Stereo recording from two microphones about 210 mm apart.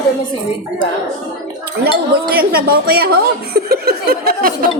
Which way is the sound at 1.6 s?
50° right (ahead or behind).